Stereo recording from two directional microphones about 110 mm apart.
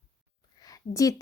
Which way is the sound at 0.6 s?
30° left (ahead or behind).